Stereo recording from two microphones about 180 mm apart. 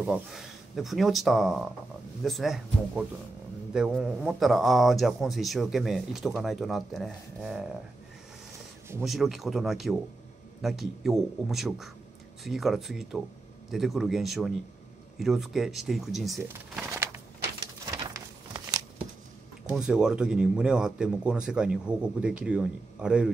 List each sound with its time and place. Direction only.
0.0 s a man's voice: 5° right (ahead or behind)
9.0 s a man's voice: centre (ahead or behind)
16.7 s a sound: 10° right (ahead or behind)
19.7 s a man's voice: 5° right (ahead or behind)